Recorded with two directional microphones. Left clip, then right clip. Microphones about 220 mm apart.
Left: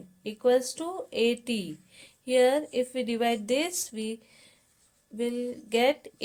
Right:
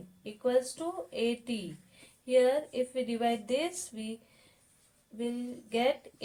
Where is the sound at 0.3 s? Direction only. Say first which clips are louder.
Left 5 dB; 50° left (ahead or behind).